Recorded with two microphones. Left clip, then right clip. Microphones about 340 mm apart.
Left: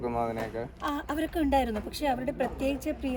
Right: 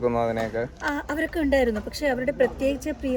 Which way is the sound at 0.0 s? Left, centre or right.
Right.